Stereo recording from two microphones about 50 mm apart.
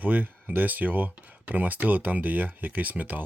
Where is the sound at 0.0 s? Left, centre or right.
Right.